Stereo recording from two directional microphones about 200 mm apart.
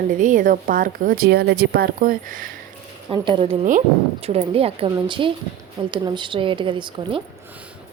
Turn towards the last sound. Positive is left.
turn(degrees=-25)  # may be behind; listen again after turning